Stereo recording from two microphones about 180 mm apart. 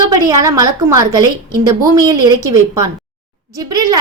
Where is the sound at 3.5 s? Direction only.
20° right (ahead or behind).